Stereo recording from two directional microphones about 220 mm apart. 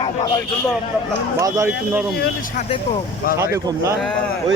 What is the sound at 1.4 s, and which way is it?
Speech, 10° right (ahead or behind).